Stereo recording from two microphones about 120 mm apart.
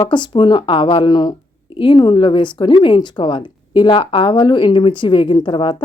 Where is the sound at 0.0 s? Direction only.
40° left (ahead or behind).